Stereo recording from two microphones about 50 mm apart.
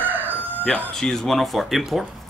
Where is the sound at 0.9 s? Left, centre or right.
Centre.